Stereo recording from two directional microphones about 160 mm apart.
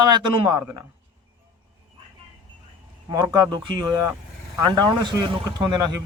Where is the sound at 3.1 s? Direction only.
25° right (ahead or behind).